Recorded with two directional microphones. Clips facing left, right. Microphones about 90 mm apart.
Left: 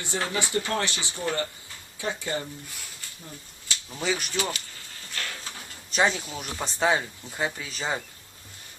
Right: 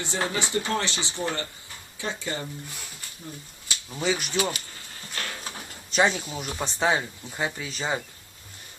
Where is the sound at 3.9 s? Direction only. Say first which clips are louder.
Right 2 dB; 10° right (ahead or behind).